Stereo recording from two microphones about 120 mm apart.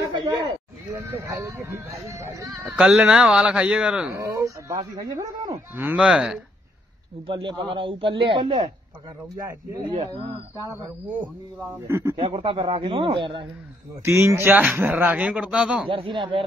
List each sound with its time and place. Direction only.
0.2 s a sound: 35° right (ahead or behind)
0.9 s speech: 25° right (ahead or behind)
2.6 s speech: 5° right (ahead or behind)
4.1 s speech: 25° right (ahead or behind)
5.8 s speech: 10° right (ahead or behind)
7.2 s a man's voice: 45° right (ahead or behind)
10.6 s speech: 25° right (ahead or behind)
11.9 s speech: 25° right (ahead or behind)
12.2 s a man's voice: 50° right (ahead or behind)
14.0 s speech: 20° right (ahead or behind)
15.9 s a man's voice: 45° right (ahead or behind)